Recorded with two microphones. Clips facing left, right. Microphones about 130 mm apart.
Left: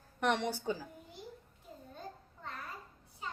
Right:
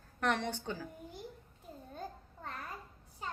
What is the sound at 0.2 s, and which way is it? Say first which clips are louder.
Speech: left 1 dB; 5° left (ahead or behind).